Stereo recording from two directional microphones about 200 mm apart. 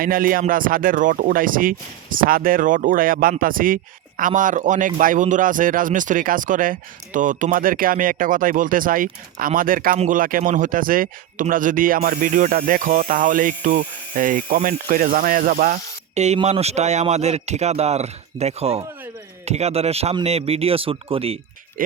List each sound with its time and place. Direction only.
0.0 s a man's voice: 45° right (ahead or behind); by 21.3 s 30° right (ahead or behind)
21.8 s speech: 45° right (ahead or behind)